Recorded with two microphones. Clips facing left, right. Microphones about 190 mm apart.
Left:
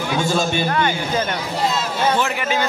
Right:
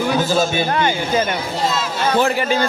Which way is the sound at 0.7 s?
25° right (ahead or behind).